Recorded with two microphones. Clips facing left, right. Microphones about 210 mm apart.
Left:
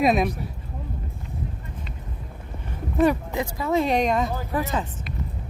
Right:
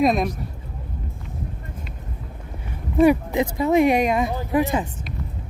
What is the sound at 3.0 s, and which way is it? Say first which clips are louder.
Speech: right 5 dB; 15° right (ahead or behind).